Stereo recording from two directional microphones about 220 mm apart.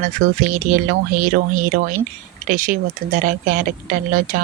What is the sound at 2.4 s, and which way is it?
Speech, 35° right (ahead or behind).